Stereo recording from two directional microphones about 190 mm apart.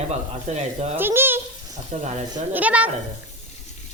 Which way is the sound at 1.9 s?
35° right (ahead or behind).